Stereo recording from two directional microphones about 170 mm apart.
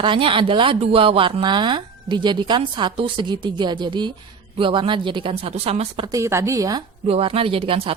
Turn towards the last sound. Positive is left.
turn(degrees=-30)  # may be behind; listen again after turning